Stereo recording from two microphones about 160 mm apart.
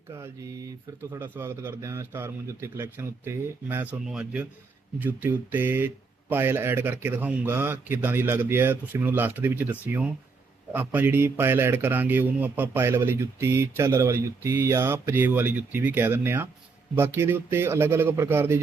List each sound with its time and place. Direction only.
0.1 s speech: 15° right (ahead or behind)